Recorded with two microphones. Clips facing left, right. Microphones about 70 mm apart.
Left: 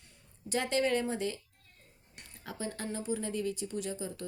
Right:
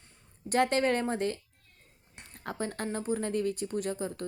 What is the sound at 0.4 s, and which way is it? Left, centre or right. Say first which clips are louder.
A woman's voice: right 4 dB; right.